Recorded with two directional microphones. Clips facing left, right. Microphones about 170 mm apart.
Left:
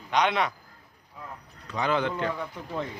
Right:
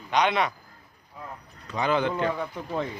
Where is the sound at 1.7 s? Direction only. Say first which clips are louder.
Right 2 dB; 10° right (ahead or behind).